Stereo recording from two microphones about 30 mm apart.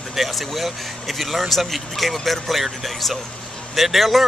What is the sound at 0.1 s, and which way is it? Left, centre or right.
Speech, centre.